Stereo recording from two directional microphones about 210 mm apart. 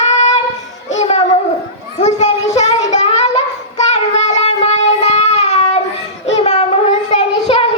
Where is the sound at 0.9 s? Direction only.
35° left (ahead or behind).